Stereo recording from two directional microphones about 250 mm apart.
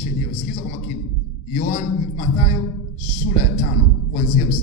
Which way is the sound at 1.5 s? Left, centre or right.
Left.